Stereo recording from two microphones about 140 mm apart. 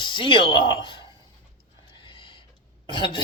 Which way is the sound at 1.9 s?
35° left (ahead or behind).